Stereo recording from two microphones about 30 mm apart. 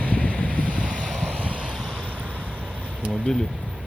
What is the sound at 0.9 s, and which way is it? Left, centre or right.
Waves, left.